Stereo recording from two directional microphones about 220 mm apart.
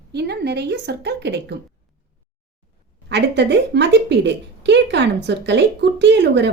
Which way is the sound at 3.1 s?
50° right (ahead or behind).